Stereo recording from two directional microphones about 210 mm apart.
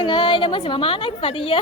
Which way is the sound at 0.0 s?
25° left (ahead or behind).